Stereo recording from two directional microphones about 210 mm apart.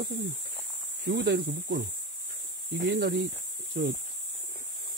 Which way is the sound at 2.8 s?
60° right (ahead or behind).